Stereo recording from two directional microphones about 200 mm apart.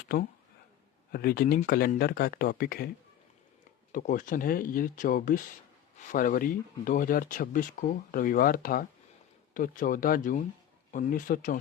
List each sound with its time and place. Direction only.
1.1 s speech: 50° left (ahead or behind)
3.9 s speech: 40° left (ahead or behind)